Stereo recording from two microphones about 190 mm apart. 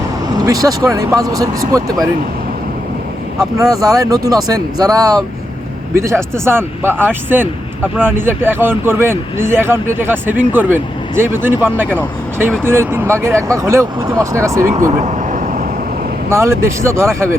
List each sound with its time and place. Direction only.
0.3 s speech: 20° right (ahead or behind)
3.6 s speech: 20° right (ahead or behind)
6.3 s speech: 10° right (ahead or behind)
14.9 s vehicle: 40° right (ahead or behind)
16.3 s speech: 15° right (ahead or behind)